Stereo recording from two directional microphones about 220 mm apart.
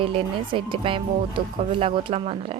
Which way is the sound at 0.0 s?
25° right (ahead or behind).